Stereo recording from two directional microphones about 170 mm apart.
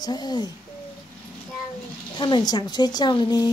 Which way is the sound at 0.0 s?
25° left (ahead or behind).